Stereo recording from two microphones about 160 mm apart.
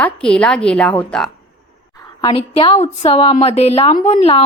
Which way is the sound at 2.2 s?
30° left (ahead or behind).